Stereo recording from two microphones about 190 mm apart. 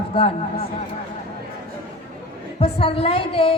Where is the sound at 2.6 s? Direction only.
30° left (ahead or behind).